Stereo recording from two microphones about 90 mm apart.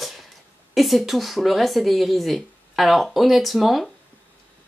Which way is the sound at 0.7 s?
Centre (ahead or behind).